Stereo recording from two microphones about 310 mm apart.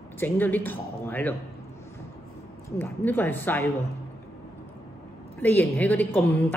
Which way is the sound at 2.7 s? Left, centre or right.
Centre.